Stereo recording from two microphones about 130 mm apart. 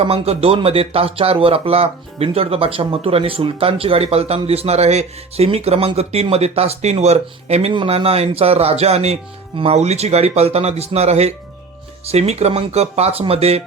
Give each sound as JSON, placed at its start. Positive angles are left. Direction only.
{"t": 0.0, "sound": "speech", "side_deg": -50}
{"t": 7.7, "sound": "speech", "side_deg": -45}